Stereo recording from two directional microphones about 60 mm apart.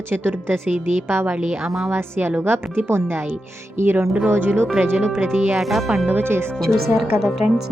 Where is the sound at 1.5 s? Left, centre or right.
Centre.